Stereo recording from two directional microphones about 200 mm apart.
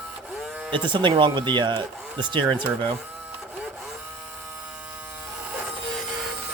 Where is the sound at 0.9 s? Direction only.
25° right (ahead or behind).